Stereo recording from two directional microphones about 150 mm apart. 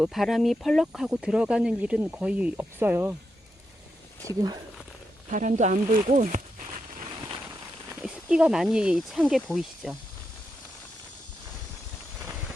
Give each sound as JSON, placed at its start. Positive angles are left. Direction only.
{"t": 0.0, "sound": "speech", "side_deg": 0}
{"t": 4.3, "sound": "speech", "side_deg": -20}
{"t": 5.3, "sound": "speech", "side_deg": -55}
{"t": 8.0, "sound": "speech", "side_deg": -5}